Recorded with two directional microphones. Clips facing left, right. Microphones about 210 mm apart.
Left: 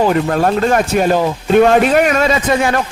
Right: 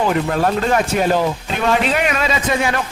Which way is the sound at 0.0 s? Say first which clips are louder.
Left 4 dB; 45° left (ahead or behind).